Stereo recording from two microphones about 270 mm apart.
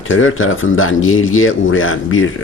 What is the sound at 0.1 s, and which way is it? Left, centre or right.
Speech, left.